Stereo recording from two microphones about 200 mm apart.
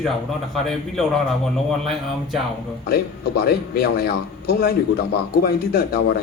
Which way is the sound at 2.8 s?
50° left (ahead or behind).